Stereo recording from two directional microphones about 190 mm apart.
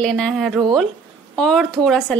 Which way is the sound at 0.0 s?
Centre (ahead or behind).